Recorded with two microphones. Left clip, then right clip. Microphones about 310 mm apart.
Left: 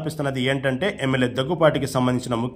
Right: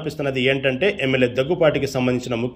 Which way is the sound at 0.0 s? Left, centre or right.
Centre.